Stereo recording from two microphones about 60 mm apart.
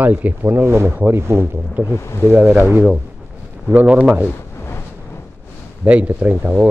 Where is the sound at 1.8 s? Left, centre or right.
Left.